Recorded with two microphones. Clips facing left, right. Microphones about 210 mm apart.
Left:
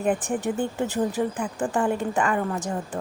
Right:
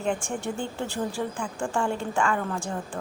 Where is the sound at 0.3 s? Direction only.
20° left (ahead or behind).